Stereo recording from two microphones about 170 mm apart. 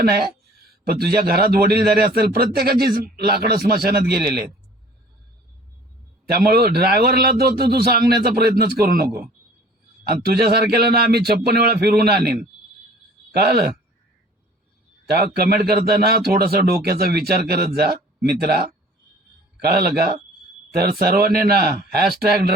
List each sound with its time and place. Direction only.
0.0 s a man's voice: 65° right (ahead or behind)
6.2 s speech: 65° right (ahead or behind)
13.3 s a man's voice: 65° right (ahead or behind)
15.1 s a man's voice: 65° right (ahead or behind)